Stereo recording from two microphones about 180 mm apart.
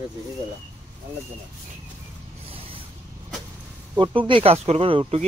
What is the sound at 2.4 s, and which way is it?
Vehicle, 30° right (ahead or behind).